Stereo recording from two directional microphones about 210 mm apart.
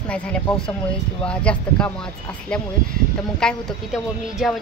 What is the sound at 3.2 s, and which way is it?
Speech, 5° left (ahead or behind).